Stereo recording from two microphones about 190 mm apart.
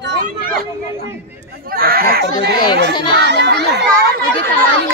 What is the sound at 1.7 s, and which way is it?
Speech, 50° right (ahead or behind).